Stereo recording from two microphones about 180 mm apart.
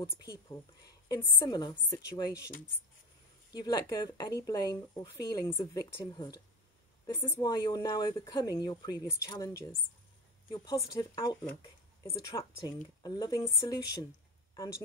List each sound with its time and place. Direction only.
0.0 s speech: 15° left (ahead or behind)
3.5 s speech: 20° left (ahead or behind)